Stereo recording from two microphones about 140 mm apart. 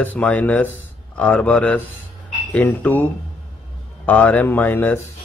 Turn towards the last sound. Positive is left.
turn(degrees=15)  # may be behind; listen again after turning